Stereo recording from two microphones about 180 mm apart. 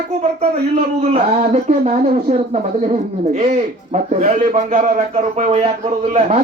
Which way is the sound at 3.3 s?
40° right (ahead or behind).